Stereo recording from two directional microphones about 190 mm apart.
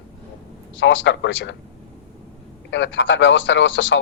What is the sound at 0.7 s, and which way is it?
Speech, 75° left (ahead or behind).